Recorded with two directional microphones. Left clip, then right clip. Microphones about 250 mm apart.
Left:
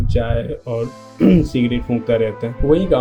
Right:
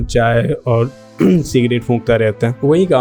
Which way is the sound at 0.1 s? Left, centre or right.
Right.